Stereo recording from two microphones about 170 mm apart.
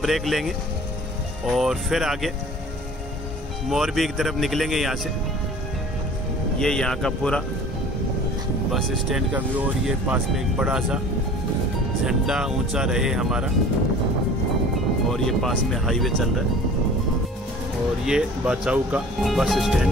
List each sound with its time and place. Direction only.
0.0 s speech: centre (ahead or behind)
3.7 s speech: centre (ahead or behind)
6.6 s speech: 5° left (ahead or behind)
8.7 s speech: centre (ahead or behind)
12.1 s speech: 5° right (ahead or behind)
15.1 s speech: centre (ahead or behind)
18.0 s speech: 5° right (ahead or behind)